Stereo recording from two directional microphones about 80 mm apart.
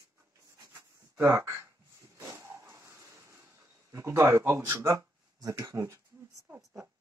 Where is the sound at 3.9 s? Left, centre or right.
Right.